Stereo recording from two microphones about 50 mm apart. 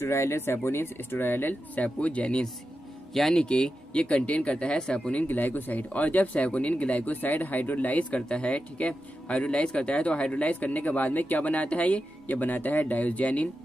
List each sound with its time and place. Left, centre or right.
0.0 s speech: left
1.8 s speech: left
3.1 s speech: centre
3.4 s speech: centre
5.3 s speech: left